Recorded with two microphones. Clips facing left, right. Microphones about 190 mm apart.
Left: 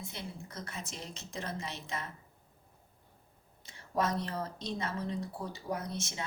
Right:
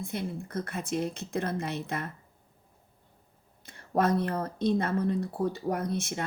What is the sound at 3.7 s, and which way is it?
Speech, 55° right (ahead or behind).